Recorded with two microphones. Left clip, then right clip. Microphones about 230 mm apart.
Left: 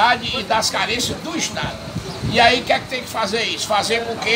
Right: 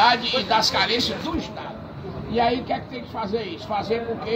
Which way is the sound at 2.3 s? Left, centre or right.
Centre.